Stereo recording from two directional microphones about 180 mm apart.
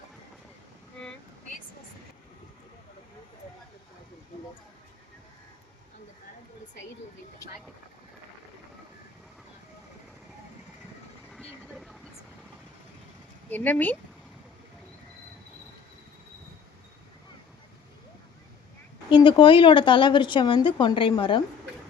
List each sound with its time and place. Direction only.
7.4 s a woman's voice: 20° left (ahead or behind)
11.3 s vehicle: centre (ahead or behind)
13.5 s speech: 10° left (ahead or behind)
19.1 s a woman's voice: 25° left (ahead or behind)